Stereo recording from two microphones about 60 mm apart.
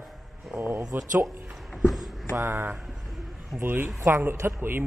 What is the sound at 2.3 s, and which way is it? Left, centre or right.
Speech, right.